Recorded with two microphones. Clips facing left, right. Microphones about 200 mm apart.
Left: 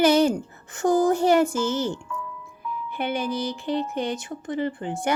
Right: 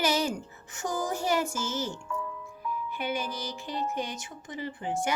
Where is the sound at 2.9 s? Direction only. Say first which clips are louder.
Left 8 dB; 60° left (ahead or behind).